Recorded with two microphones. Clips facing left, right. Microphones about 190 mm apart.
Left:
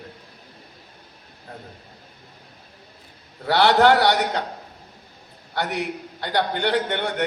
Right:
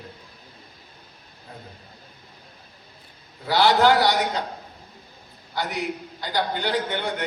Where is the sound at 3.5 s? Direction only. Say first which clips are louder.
Left 2 dB; 60° left (ahead or behind).